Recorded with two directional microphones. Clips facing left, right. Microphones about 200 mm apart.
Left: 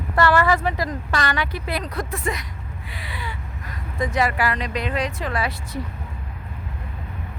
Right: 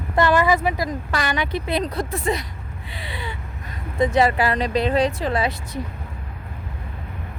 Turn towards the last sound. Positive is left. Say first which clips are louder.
# right 3 dB
turn(degrees=-20)  # may be behind; listen again after turning